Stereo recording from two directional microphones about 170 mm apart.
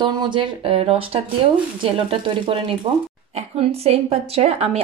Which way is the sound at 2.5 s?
30° right (ahead or behind).